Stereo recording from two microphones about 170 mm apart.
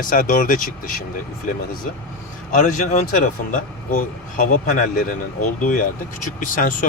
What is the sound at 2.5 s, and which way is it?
Speech, 50° left (ahead or behind).